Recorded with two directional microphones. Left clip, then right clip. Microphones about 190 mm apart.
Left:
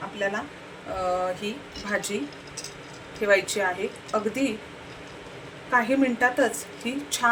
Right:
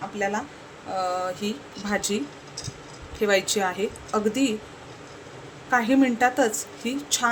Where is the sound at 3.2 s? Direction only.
45° right (ahead or behind).